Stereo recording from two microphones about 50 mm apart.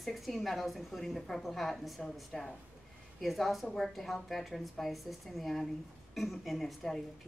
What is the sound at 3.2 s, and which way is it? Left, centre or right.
Speech, centre.